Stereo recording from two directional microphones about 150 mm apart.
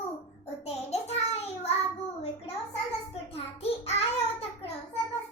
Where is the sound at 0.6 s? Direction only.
45° left (ahead or behind).